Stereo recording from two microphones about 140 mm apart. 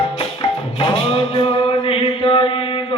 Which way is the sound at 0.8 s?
40° left (ahead or behind).